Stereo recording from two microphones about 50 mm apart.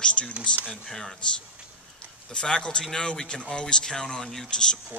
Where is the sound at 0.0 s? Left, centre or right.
Left.